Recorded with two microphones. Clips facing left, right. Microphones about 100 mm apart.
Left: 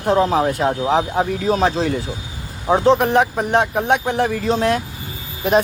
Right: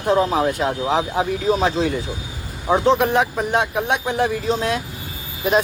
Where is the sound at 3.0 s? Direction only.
50° left (ahead or behind).